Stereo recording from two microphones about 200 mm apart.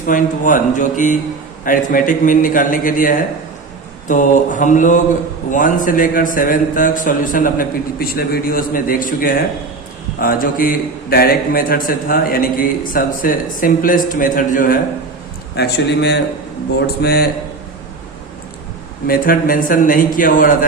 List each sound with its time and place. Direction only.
0.1 s a man's voice: 40° left (ahead or behind)
15.5 s a man's voice: 55° left (ahead or behind)
19.0 s a man's voice: 45° left (ahead or behind)